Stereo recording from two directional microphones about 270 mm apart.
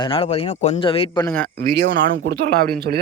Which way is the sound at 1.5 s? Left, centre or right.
Right.